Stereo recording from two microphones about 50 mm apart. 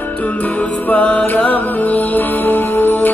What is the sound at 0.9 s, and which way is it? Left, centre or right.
Music, left.